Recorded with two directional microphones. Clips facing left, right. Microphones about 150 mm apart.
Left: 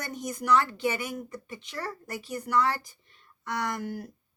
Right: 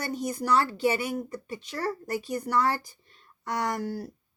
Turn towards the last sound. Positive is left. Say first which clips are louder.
# right 2 dB
turn(degrees=-35)  # may be behind; listen again after turning